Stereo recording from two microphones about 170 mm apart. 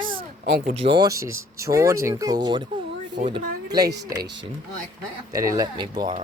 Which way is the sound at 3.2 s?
60° right (ahead or behind).